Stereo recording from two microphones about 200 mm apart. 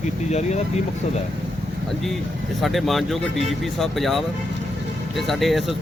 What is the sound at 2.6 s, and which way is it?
Speech, centre (ahead or behind).